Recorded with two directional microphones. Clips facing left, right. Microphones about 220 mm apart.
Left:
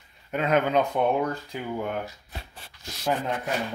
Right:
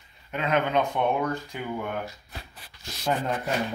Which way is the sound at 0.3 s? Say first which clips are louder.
Left 2 dB; 45° left (ahead or behind).